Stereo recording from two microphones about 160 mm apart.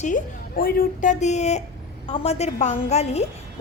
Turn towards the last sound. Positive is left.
turn(degrees=40)  # may be behind; listen again after turning